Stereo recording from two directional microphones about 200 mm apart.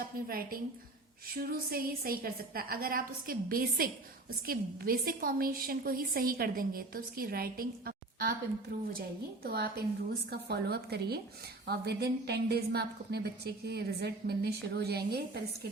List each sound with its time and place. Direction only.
0.3 s a woman's voice: 45° right (ahead or behind)